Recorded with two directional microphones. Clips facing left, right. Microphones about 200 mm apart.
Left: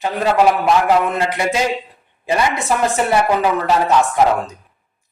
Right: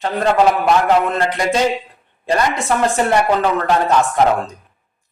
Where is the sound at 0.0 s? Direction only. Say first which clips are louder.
Even; 10° left (ahead or behind).